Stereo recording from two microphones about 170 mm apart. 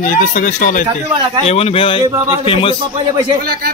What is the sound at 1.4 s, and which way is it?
Speech, 35° left (ahead or behind).